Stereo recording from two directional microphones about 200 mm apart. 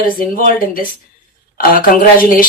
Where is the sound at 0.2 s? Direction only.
45° left (ahead or behind).